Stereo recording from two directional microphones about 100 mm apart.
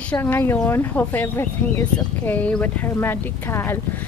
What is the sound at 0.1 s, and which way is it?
A woman's voice, 20° left (ahead or behind).